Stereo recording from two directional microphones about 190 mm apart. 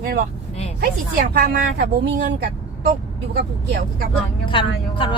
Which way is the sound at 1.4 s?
55° right (ahead or behind).